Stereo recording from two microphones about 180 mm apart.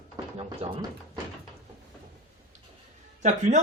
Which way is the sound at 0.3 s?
25° right (ahead or behind).